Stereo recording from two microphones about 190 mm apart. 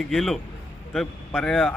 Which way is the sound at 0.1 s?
Centre (ahead or behind).